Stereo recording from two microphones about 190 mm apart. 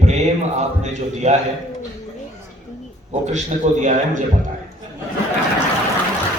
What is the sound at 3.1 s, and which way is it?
A man's voice, 35° right (ahead or behind).